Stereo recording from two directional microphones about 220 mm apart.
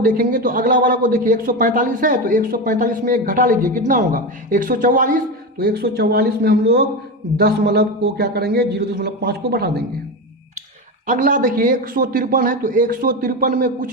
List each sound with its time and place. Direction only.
0.0 s a man's voice: 40° right (ahead or behind)
11.0 s speech: 35° right (ahead or behind)